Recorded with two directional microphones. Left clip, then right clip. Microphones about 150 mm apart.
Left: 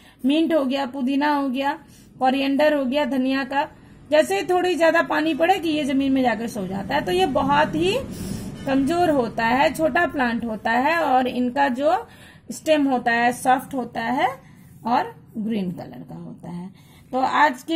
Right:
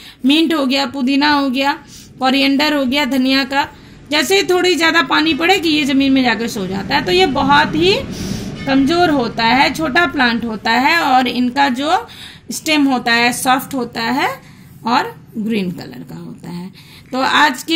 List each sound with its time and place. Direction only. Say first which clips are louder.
0.3 s a woman's voice: right 6 dB; 50° left (ahead or behind)
17.1 s a woman's voice: right 5 dB; 50° left (ahead or behind)